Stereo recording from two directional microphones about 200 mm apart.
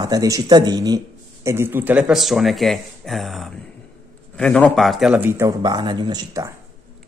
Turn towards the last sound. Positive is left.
turn(degrees=-20)  # may be behind; listen again after turning